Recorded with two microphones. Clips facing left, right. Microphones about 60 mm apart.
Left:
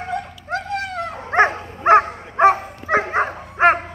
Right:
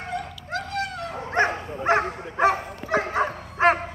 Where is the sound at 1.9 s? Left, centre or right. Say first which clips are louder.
Left 9 dB; left.